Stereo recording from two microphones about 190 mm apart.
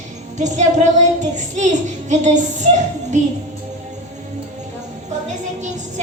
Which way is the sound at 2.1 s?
40° right (ahead or behind).